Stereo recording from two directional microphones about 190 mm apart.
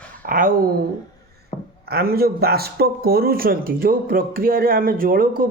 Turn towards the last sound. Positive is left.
turn(degrees=-50)  # may be behind; listen again after turning